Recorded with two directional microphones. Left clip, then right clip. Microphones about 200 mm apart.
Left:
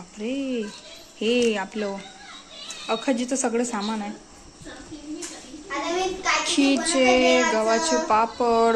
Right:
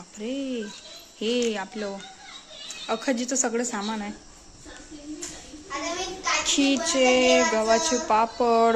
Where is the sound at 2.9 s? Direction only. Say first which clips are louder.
Left 2 dB; 20° right (ahead or behind).